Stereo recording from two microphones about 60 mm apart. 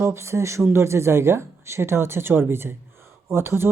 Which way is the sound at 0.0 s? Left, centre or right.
Right.